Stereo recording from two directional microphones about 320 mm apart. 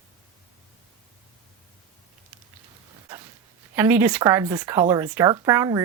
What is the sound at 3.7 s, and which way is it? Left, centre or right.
Speech, centre.